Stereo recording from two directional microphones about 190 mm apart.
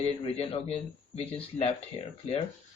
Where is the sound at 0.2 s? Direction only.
30° left (ahead or behind).